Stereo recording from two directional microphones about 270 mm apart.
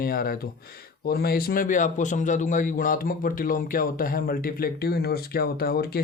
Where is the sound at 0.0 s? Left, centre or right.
Left.